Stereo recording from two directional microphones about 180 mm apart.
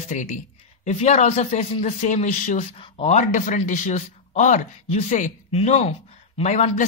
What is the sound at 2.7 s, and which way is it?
A man's voice, 35° left (ahead or behind).